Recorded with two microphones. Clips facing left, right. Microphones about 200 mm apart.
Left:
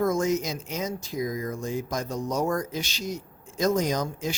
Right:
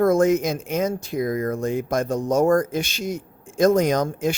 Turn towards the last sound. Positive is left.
turn(degrees=-55)  # may be behind; listen again after turning